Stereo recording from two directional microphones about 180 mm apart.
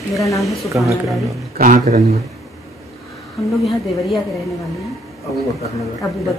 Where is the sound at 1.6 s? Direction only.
45° right (ahead or behind).